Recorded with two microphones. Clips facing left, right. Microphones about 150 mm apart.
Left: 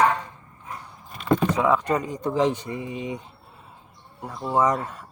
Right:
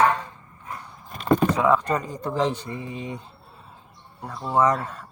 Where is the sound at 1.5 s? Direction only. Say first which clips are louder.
Even; 15° left (ahead or behind).